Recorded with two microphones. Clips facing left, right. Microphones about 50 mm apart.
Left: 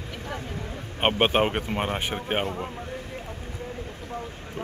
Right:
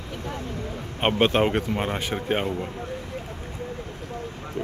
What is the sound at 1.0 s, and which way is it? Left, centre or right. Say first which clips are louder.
Speech: right 1 dB; left.